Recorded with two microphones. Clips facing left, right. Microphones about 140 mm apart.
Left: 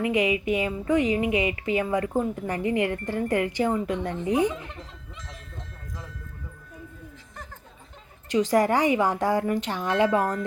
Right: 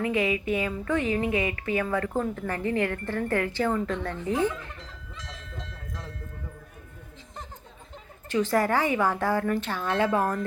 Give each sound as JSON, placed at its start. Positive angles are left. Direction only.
{"t": 0.0, "sound": "speech", "side_deg": 15}
{"t": 8.3, "sound": "speech", "side_deg": 15}